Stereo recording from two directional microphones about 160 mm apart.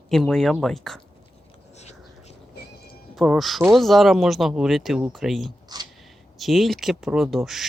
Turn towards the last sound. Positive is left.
turn(degrees=0)  # may be behind; listen again after turning